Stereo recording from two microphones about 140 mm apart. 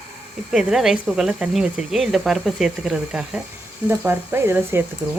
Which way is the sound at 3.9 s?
15° right (ahead or behind).